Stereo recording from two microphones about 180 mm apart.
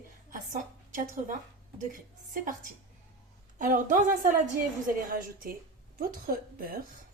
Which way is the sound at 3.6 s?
45° right (ahead or behind).